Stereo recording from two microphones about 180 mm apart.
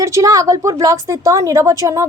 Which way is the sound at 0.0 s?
15° right (ahead or behind).